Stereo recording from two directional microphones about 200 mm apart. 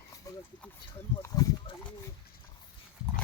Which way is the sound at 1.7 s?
25° left (ahead or behind).